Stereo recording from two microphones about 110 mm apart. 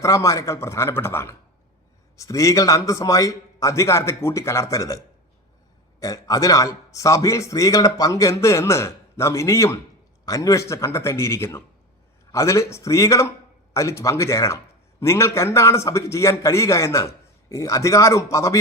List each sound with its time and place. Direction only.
0.0 s a man's voice: 30° left (ahead or behind)
6.0 s a man's voice: 30° left (ahead or behind)